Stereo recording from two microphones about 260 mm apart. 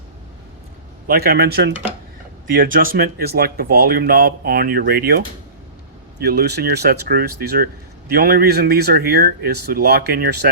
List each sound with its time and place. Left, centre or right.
1.0 s speech: right
6.2 s speech: right